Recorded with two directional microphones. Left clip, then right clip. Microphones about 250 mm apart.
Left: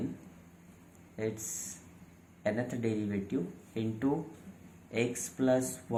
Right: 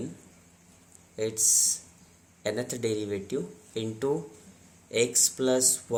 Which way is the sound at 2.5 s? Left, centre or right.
Right.